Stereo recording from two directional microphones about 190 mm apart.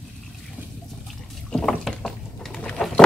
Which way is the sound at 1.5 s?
5° left (ahead or behind).